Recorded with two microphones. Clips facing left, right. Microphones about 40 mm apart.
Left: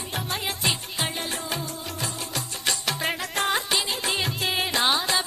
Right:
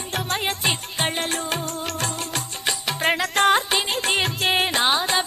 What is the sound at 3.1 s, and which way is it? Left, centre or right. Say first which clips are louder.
Music: right 7 dB; right.